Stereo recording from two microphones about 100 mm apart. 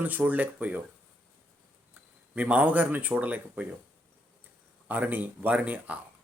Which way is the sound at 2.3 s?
15° right (ahead or behind).